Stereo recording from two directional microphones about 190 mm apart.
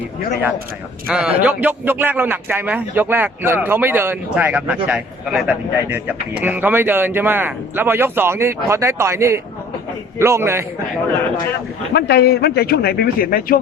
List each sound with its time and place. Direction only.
1.0 s a man's voice: 5° right (ahead or behind)
11.9 s a man's voice: 60° left (ahead or behind)